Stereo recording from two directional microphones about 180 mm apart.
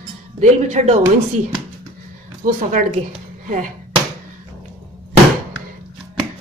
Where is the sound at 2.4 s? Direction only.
45° right (ahead or behind).